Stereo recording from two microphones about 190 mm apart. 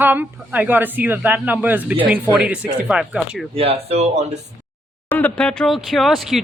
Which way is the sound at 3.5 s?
30° right (ahead or behind).